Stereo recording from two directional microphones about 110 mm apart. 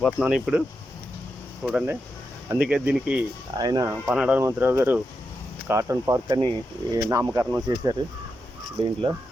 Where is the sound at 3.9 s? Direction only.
10° right (ahead or behind); by 6.2 s 30° right (ahead or behind).